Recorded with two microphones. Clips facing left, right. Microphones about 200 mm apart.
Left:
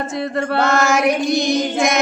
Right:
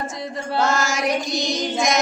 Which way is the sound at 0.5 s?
60° left (ahead or behind).